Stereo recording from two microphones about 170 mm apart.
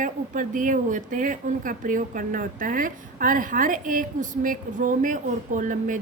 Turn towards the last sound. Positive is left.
turn(degrees=-50)  # may be behind; listen again after turning